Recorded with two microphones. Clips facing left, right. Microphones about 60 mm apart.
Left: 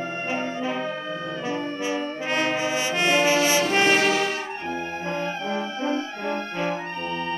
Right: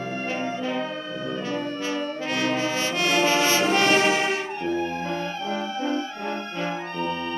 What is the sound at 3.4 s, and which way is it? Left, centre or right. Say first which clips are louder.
Brass instrument: even; right.